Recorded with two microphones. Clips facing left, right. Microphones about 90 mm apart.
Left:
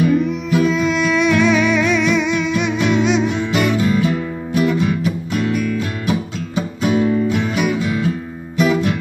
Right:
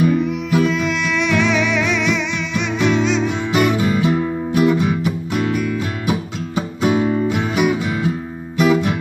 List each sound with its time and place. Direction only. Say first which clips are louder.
0.0 s music: left 1 dB; 5° right (ahead or behind)
3.5 s music: right 1 dB; 15° right (ahead or behind)